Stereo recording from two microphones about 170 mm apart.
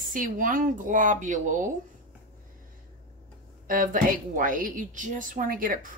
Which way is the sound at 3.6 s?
55° right (ahead or behind).